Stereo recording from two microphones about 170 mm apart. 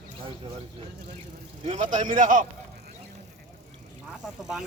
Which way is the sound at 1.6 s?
45° right (ahead or behind).